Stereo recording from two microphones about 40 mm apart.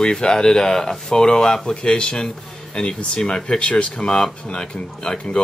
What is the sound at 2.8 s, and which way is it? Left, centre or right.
Speech, left.